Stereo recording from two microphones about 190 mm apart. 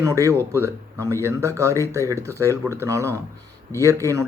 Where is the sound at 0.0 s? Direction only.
15° right (ahead or behind).